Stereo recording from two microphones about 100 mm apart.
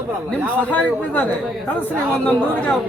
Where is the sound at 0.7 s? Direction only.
15° left (ahead or behind).